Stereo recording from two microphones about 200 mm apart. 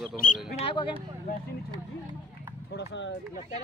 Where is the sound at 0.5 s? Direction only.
30° left (ahead or behind).